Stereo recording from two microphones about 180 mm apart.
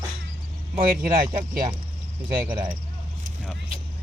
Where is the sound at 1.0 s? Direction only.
50° right (ahead or behind).